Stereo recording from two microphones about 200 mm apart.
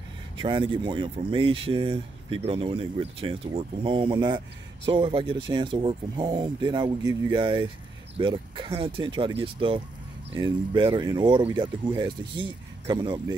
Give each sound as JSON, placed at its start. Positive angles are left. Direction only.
{"t": 0.4, "sound": "speech", "side_deg": -25}